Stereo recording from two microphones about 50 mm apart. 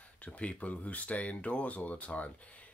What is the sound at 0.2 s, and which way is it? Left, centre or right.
Speech, left.